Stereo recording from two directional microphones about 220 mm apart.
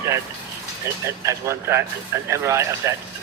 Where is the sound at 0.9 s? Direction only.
15° right (ahead or behind).